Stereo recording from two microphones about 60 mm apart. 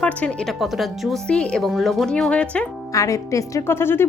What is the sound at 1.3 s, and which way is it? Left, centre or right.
Speech, centre.